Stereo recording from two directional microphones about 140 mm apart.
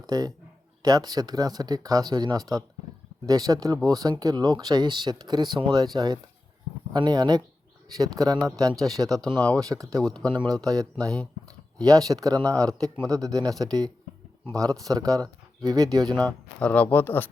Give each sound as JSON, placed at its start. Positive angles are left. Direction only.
{"t": 0.0, "sound": "a man's voice", "side_deg": -30}
{"t": 8.6, "sound": "speech", "side_deg": 0}
{"t": 9.6, "sound": "speech", "side_deg": -25}
{"t": 10.0, "sound": "speech", "side_deg": 5}
{"t": 10.3, "sound": "speech", "side_deg": -30}
{"t": 16.0, "sound": "speech", "side_deg": 10}